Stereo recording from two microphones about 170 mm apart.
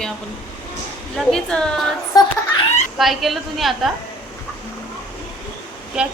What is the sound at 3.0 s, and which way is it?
Speech, centre (ahead or behind).